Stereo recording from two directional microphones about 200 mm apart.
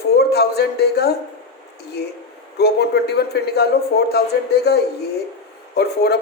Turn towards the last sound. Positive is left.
turn(degrees=55)  # may be behind; listen again after turning